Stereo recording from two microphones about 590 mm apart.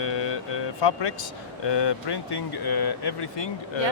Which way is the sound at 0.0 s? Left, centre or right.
Left.